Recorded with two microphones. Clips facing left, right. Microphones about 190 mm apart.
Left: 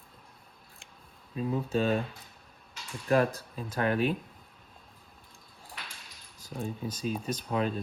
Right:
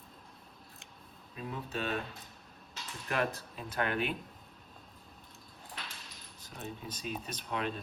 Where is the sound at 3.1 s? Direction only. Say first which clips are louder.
Left 8 dB; 40° left (ahead or behind).